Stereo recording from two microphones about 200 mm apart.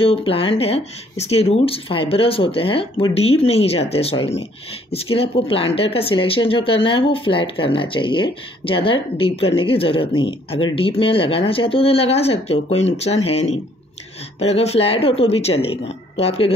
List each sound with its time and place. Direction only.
0.0 s speech: 30° left (ahead or behind)